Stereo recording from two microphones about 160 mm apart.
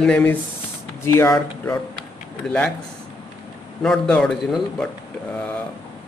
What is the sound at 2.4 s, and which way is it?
Speech, 5° left (ahead or behind).